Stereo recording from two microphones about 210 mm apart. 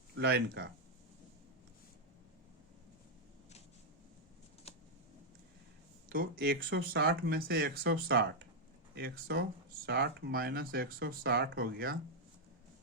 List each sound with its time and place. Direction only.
0.2 s speech: 55° right (ahead or behind)
4.7 s a sound: 30° left (ahead or behind)
6.1 s speech: 50° right (ahead or behind)